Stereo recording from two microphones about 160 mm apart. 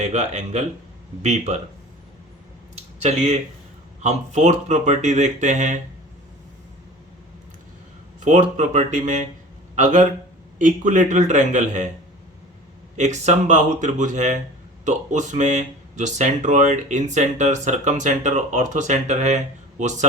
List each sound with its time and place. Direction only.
0.0 s speech: 45° right (ahead or behind)
2.7 s a sound: 45° right (ahead or behind)
4.0 s speech: 45° right (ahead or behind)
8.2 s speech: 50° right (ahead or behind)
13.0 s speech: 45° right (ahead or behind)